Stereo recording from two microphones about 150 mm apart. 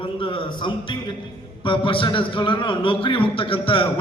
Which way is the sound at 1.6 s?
35° left (ahead or behind).